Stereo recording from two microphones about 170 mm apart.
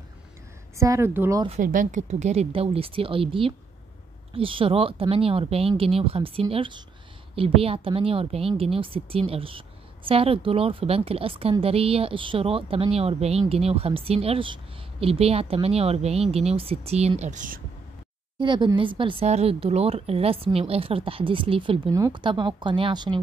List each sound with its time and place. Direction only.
0.7 s speech: 15° right (ahead or behind)
1.6 s a woman's voice: 50° right (ahead or behind)
18.4 s a woman's voice: 25° right (ahead or behind)